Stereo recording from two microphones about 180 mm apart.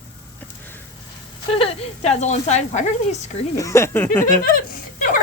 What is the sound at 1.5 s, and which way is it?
Speech, 30° left (ahead or behind).